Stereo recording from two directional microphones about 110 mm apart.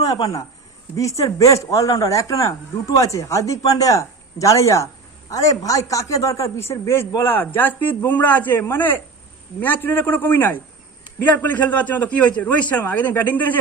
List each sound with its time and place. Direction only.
0.0 s a man's voice: 30° left (ahead or behind); by 13.6 s 15° left (ahead or behind)